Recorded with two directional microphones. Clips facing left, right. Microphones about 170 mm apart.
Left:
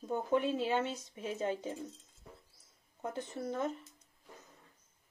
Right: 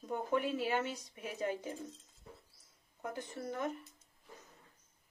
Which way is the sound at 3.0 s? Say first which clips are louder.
Left 3 dB; 25° left (ahead or behind).